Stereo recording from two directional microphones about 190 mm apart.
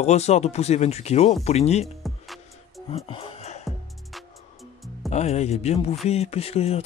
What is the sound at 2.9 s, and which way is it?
Music, 30° left (ahead or behind).